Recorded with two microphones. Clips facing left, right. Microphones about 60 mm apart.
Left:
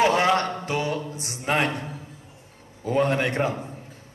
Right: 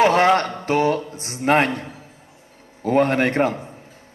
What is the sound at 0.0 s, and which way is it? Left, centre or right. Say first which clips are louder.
Mantra: right 5 dB; right.